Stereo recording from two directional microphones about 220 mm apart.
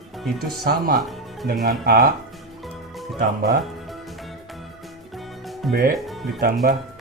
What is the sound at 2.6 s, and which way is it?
Music, centre (ahead or behind).